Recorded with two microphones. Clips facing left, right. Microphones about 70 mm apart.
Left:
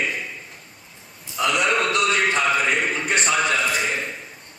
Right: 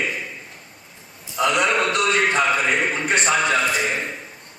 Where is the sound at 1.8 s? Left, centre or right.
Right.